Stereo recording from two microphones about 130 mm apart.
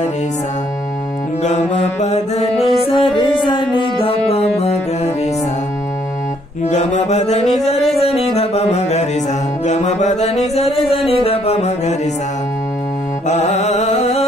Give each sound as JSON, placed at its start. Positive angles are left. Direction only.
{"t": 1.4, "sound": "music", "side_deg": 65}
{"t": 2.8, "sound": "music", "side_deg": 45}
{"t": 6.7, "sound": "music", "side_deg": 70}
{"t": 13.3, "sound": "music", "side_deg": 60}